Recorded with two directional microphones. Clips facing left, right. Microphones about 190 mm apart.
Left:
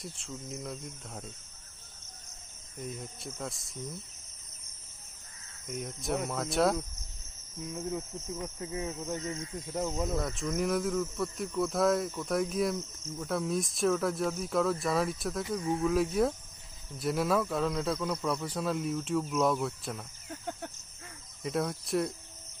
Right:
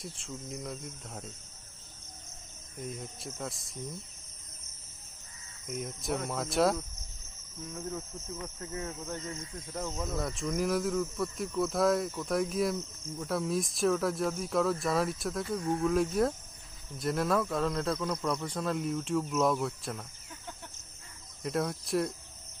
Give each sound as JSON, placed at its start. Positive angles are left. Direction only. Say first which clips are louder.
{"t": 0.0, "sound": "speech", "louder": "even", "side_deg": 0}
{"t": 2.7, "sound": "speech", "louder": "even", "side_deg": 0}
{"t": 5.6, "sound": "speech", "louder": "even", "side_deg": 0}
{"t": 7.7, "sound": "speech", "louder": "left 3 dB", "side_deg": 15}
{"t": 10.2, "sound": "speech", "louder": "even", "side_deg": 0}
{"t": 20.3, "sound": "a sound", "louder": "left 8 dB", "side_deg": 50}
{"t": 21.4, "sound": "speech", "louder": "even", "side_deg": 0}